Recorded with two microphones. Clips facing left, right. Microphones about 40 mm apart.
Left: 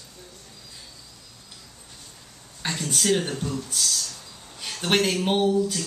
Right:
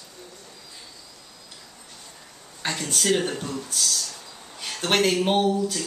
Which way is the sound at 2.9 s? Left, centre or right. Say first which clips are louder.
Even; centre.